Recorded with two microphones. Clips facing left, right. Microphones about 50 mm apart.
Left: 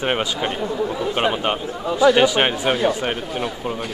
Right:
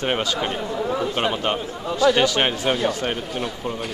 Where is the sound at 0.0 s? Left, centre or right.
Centre.